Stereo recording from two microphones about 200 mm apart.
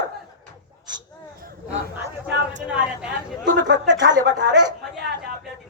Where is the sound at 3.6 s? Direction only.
65° right (ahead or behind).